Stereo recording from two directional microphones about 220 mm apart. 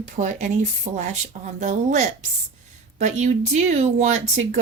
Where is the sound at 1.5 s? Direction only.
35° right (ahead or behind).